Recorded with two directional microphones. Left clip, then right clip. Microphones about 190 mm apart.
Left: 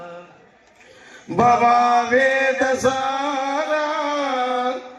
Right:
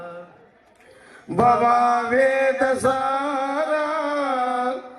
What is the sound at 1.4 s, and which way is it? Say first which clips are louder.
Chant: left 2 dB; 45° left (ahead or behind).